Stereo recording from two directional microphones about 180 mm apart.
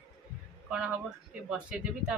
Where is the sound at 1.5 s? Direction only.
5° right (ahead or behind).